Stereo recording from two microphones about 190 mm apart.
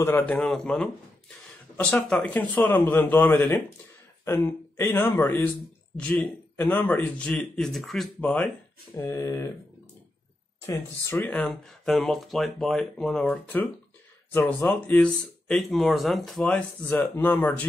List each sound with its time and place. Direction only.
0.0 s speech: 10° left (ahead or behind)
10.7 s speech: 15° left (ahead or behind)
11.2 s speech: 5° left (ahead or behind)